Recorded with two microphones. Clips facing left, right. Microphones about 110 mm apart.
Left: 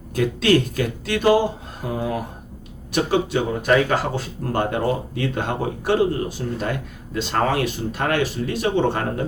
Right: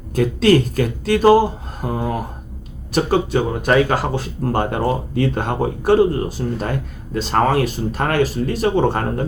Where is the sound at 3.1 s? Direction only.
45° right (ahead or behind).